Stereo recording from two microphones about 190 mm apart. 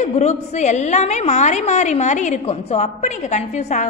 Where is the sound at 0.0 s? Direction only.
35° left (ahead or behind).